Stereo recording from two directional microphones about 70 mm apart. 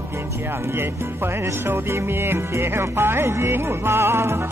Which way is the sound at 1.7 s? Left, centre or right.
Right.